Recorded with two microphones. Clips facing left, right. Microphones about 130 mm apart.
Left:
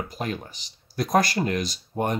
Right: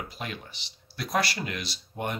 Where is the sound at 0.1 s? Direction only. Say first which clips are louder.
Left 7 dB; 40° left (ahead or behind).